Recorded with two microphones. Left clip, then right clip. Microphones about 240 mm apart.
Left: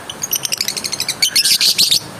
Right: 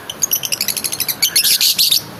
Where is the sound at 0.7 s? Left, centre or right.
Centre.